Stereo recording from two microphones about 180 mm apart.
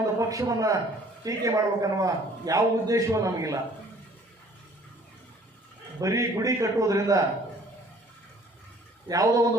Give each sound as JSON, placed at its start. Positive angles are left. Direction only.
{"t": 0.2, "sound": "a man's voice", "side_deg": -20}
{"t": 6.0, "sound": "a man's voice", "side_deg": -20}
{"t": 9.0, "sound": "a man's voice", "side_deg": -20}